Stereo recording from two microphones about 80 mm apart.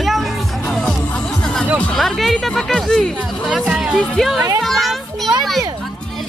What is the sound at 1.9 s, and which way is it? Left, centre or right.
Speech, centre.